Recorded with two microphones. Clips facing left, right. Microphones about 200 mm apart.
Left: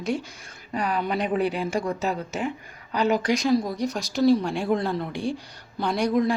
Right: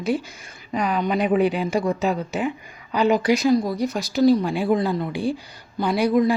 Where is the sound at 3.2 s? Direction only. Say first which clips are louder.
Right 4 dB; 5° right (ahead or behind).